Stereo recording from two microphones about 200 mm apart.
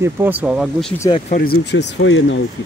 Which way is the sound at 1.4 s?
55° left (ahead or behind).